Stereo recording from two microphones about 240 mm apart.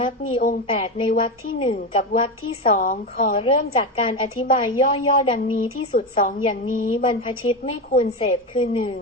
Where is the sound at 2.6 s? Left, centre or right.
Left.